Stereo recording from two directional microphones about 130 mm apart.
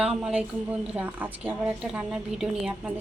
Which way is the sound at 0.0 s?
5° right (ahead or behind).